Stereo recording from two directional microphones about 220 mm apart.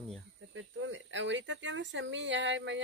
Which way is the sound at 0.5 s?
60° right (ahead or behind).